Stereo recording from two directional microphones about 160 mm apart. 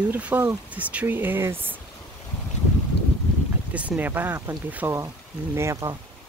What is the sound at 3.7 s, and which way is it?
Speech, 10° right (ahead or behind).